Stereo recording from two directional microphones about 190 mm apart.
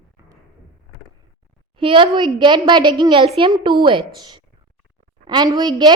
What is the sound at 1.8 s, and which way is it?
A woman's voice, 25° right (ahead or behind).